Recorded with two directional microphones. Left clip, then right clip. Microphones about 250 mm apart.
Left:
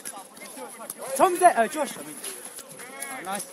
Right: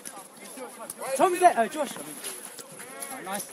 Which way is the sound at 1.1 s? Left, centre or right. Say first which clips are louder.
Left 2 dB; centre.